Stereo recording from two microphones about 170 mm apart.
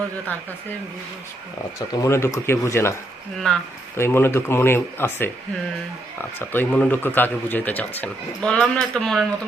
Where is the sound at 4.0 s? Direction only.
15° left (ahead or behind).